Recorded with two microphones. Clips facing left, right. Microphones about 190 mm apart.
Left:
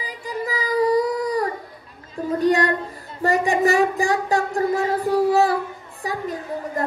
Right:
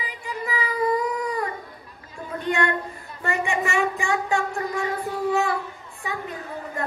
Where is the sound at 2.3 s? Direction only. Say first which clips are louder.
Left 6 dB; 35° left (ahead or behind).